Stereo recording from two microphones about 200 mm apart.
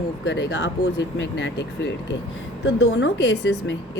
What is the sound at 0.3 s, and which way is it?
A woman's voice, 60° left (ahead or behind).